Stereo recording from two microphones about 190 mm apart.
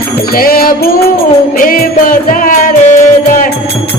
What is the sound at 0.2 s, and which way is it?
Music, 50° left (ahead or behind).